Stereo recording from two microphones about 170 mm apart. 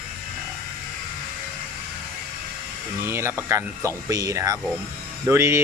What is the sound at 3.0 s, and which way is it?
Speech, 15° right (ahead or behind).